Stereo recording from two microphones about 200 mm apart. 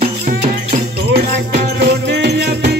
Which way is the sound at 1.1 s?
55° right (ahead or behind).